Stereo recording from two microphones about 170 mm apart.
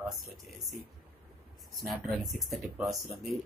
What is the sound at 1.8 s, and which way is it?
Speech, centre (ahead or behind).